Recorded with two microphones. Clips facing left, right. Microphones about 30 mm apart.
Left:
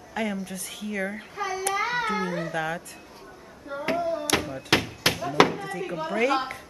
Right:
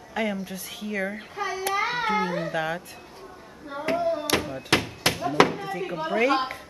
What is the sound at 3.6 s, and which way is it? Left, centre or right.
Hands, right.